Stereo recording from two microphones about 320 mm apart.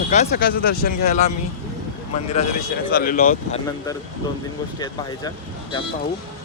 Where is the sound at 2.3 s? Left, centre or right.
Centre.